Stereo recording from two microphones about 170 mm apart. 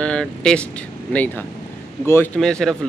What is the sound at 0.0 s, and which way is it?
Speech, 5° left (ahead or behind).